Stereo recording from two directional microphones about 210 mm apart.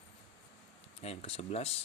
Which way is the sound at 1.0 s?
30° left (ahead or behind).